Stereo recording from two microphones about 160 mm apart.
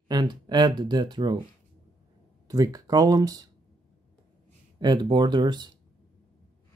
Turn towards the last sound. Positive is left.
turn(degrees=-30)  # may be behind; listen again after turning